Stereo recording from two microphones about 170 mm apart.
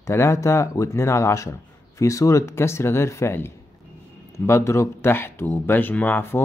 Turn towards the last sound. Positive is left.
turn(degrees=15)  # may be behind; listen again after turning